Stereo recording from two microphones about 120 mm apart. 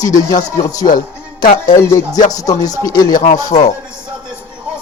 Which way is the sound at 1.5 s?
90° left.